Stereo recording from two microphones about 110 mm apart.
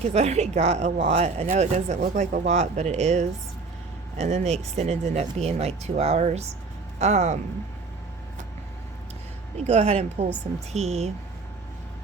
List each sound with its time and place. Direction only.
0.1 s speech: 85° right
7.0 s speech: 90° right
9.6 s speech: 85° right